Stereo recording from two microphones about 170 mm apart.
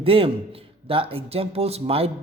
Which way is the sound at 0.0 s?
35° right (ahead or behind).